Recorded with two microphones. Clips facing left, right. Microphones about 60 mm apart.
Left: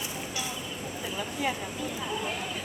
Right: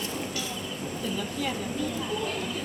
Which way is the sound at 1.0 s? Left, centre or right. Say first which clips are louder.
Even; left.